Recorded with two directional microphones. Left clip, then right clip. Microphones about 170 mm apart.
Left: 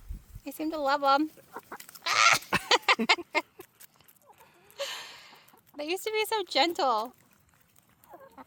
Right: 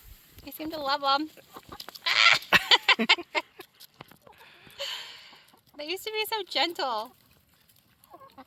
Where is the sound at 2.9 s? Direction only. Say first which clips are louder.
Even; 90° left.